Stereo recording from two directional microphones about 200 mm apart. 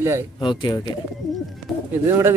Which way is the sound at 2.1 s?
15° right (ahead or behind).